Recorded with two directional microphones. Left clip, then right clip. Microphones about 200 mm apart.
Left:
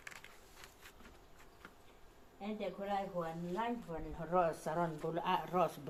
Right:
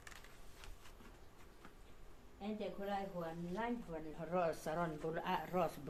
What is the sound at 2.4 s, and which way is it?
A woman's voice, 15° left (ahead or behind).